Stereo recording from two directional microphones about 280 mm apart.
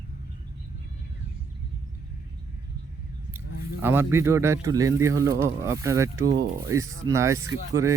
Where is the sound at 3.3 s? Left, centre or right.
Centre.